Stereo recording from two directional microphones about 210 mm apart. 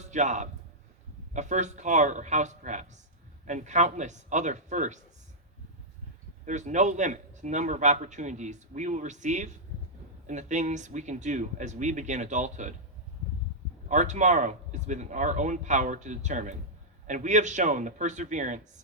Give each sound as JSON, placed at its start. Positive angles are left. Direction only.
{"t": 0.0, "sound": "a man's voice", "side_deg": -35}
{"t": 6.4, "sound": "a man's voice", "side_deg": -35}
{"t": 13.8, "sound": "a man's voice", "side_deg": -35}